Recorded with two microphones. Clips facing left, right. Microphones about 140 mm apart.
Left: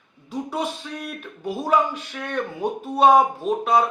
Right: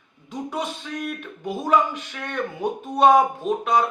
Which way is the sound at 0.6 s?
5° left (ahead or behind).